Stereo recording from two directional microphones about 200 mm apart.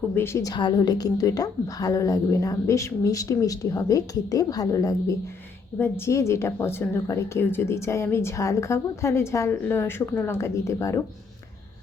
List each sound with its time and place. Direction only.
0.1 s speech: 15° left (ahead or behind)